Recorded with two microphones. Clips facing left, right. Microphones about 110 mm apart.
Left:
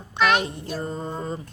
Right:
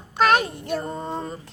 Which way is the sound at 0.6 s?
65° right (ahead or behind).